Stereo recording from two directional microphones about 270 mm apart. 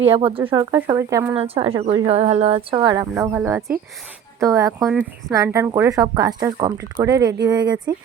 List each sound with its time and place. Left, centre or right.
0.3 s speech: centre
4.8 s speech: centre
5.3 s speech: centre